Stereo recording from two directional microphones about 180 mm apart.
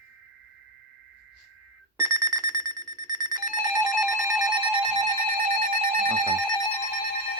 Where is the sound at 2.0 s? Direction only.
20° right (ahead or behind).